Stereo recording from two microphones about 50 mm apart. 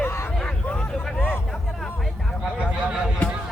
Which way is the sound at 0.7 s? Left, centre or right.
Left.